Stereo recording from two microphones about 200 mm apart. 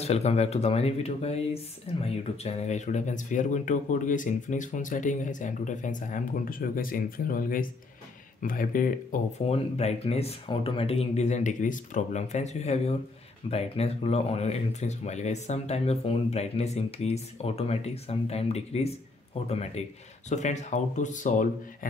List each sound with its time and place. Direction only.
0.0 s speech: 30° left (ahead or behind)
9.5 s speech: 30° left (ahead or behind)